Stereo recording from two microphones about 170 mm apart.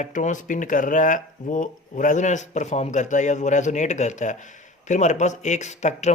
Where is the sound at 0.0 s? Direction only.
45° left (ahead or behind).